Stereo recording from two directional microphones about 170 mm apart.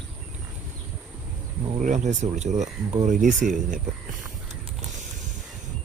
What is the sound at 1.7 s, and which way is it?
Speech, 45° right (ahead or behind).